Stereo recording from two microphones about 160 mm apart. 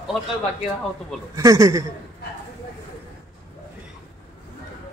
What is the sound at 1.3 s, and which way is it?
Speech, 20° right (ahead or behind).